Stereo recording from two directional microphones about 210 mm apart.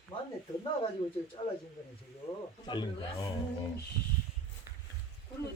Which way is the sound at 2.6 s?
20° left (ahead or behind).